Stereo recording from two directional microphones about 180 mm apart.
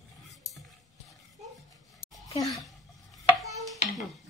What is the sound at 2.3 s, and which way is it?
Speech, 20° left (ahead or behind).